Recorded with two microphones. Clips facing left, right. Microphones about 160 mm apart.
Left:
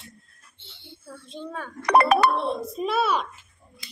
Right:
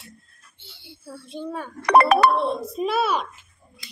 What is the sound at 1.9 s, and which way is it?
Speech, 70° right (ahead or behind).